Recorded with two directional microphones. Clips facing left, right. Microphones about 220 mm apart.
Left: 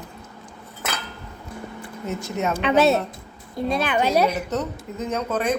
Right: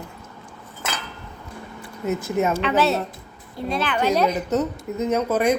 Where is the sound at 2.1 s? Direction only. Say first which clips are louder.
Right 4 dB; 10° right (ahead or behind).